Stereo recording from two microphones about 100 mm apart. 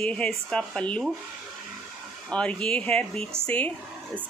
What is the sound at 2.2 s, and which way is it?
A woman's voice, 10° left (ahead or behind).